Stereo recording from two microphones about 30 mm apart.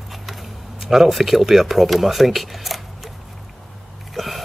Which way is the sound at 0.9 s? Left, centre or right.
Centre.